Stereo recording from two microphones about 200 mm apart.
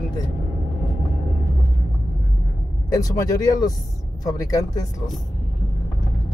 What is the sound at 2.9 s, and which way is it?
Speech, 15° left (ahead or behind).